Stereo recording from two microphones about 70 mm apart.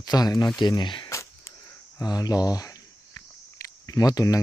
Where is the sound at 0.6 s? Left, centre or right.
Left.